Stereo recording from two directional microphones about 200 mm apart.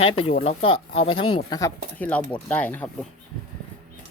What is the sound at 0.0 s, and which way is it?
Speech, 30° left (ahead or behind).